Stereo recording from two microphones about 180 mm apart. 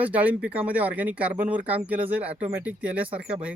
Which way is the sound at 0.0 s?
10° right (ahead or behind).